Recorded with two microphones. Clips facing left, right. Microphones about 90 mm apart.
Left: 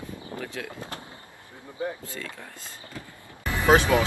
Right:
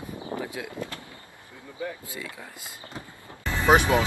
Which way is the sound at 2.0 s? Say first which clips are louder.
Even; 15° right (ahead or behind).